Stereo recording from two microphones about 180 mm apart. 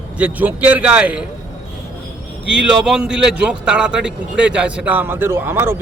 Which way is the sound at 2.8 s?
5° right (ahead or behind).